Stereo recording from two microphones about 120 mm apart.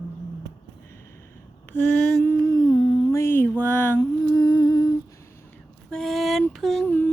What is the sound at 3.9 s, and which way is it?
Humming, 35° left (ahead or behind).